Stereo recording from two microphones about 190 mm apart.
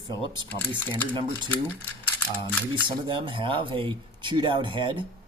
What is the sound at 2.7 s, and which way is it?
Speech, 25° right (ahead or behind).